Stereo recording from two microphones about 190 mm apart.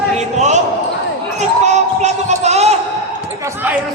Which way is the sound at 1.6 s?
35° right (ahead or behind).